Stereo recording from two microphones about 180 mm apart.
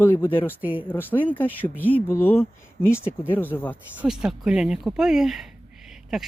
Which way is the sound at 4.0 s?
5° right (ahead or behind).